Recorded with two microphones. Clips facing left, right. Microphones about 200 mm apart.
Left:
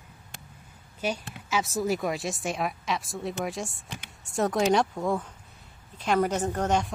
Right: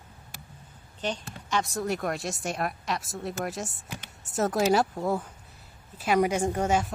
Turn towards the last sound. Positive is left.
turn(degrees=-10)  # may be behind; listen again after turning